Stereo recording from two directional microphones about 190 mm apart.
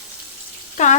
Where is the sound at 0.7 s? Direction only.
40° left (ahead or behind).